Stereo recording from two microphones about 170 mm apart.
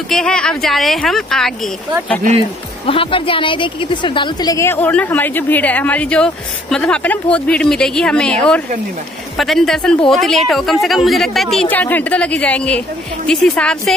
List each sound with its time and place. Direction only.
0.1 s speech: 5° left (ahead or behind)
2.9 s a woman's voice: 30° left (ahead or behind); by 13.9 s 5° left (ahead or behind)